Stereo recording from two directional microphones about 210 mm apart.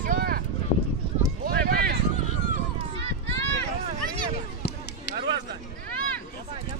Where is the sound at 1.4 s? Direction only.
50° right (ahead or behind).